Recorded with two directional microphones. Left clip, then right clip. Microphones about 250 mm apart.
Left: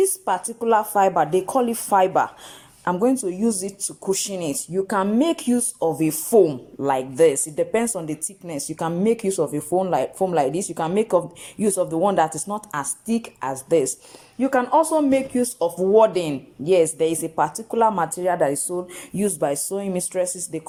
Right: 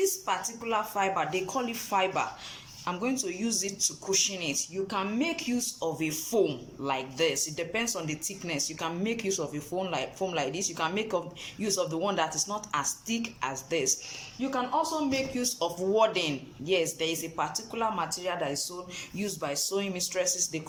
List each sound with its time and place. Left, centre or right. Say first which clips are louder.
0.0 s speech: left 8 dB; left
14.4 s speech: left 11 dB; left